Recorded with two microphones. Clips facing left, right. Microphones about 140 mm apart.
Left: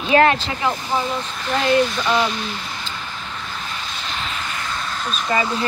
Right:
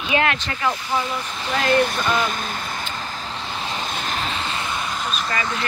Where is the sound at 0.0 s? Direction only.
35° left (ahead or behind).